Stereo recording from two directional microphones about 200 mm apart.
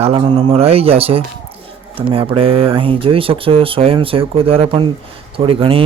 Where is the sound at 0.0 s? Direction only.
25° right (ahead or behind).